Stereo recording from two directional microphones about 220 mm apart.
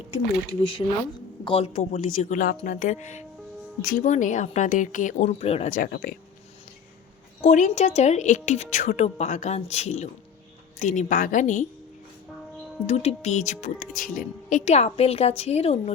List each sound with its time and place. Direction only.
0.6 s a woman's voice: 20° left (ahead or behind); by 6.1 s 40° left (ahead or behind)
7.4 s a woman's voice: 35° left (ahead or behind)
12.9 s a woman's voice: 30° left (ahead or behind)